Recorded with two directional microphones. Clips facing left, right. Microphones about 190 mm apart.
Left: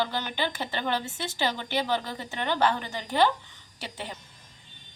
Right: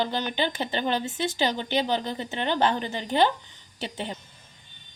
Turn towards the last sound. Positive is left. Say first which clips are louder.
# right 5 dB
turn(degrees=-20)  # may be behind; listen again after turning